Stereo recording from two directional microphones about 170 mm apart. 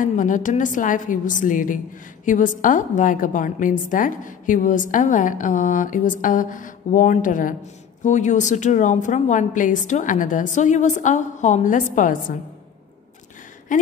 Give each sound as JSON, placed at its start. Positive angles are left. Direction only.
{"t": 0.1, "sound": "a woman's voice", "side_deg": 50}
{"t": 13.7, "sound": "a woman's voice", "side_deg": 50}